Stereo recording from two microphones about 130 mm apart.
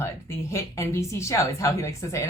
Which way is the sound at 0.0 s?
20° left (ahead or behind).